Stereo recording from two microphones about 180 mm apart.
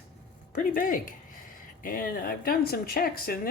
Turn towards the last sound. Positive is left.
turn(degrees=55)  # may be behind; listen again after turning